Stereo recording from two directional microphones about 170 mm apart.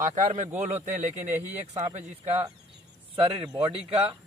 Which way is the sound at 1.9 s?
40° right (ahead or behind).